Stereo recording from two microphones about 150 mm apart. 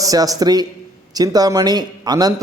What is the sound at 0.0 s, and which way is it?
A man's voice, 25° right (ahead or behind).